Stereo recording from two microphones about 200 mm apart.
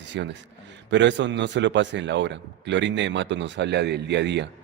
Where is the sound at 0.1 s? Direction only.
60° right (ahead or behind).